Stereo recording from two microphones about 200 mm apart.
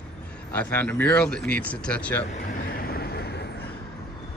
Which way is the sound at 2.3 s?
40° left (ahead or behind).